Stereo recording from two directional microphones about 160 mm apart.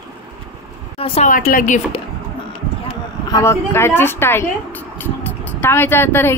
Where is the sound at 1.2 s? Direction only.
55° left (ahead or behind).